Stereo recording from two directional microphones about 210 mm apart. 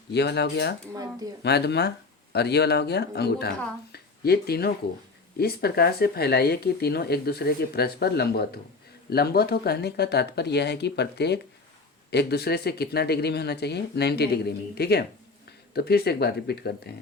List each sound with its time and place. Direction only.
0.1 s speech: 55° left (ahead or behind)
3.9 s a sound: 50° left (ahead or behind)
5.4 s speech: 50° left (ahead or behind)